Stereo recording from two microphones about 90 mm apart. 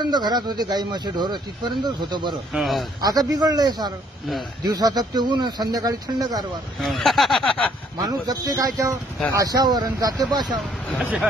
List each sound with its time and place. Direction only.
0.0 s speech: 50° right (ahead or behind)
2.5 s speech: centre (ahead or behind)
3.0 s speech: 45° right (ahead or behind)
6.8 s speech: centre (ahead or behind)
8.0 s a man's voice: 40° right (ahead or behind)